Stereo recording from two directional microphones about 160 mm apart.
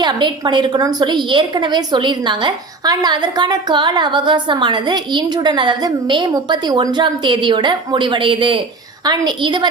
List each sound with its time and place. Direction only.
0.0 s a woman's voice: 30° right (ahead or behind)